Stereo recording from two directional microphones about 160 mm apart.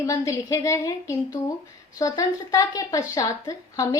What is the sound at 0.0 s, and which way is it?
Speech, 20° left (ahead or behind).